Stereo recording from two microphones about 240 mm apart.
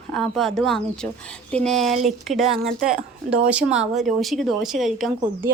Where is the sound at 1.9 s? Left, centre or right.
Right.